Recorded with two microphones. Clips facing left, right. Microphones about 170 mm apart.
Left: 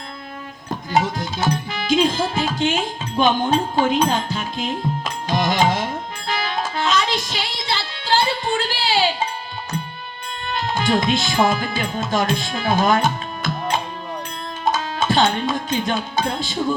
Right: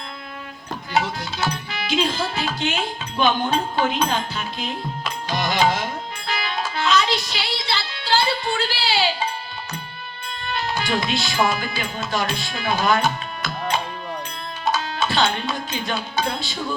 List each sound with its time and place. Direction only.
0.9 s music: 45° left (ahead or behind)
10.4 s speech: 45° left (ahead or behind)
14.6 s music: 45° left (ahead or behind)